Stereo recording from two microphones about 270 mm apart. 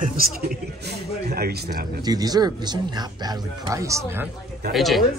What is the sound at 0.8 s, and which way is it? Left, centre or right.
A man's voice, right.